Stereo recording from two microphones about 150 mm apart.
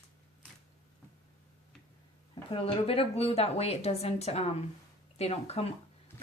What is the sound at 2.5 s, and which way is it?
Speech, 40° left (ahead or behind).